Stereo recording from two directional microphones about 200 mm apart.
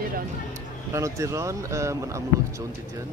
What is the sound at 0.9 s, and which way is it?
Speech, 15° right (ahead or behind).